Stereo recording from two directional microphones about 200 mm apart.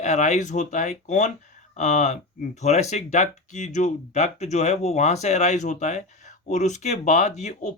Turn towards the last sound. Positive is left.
turn(degrees=35)  # may be behind; listen again after turning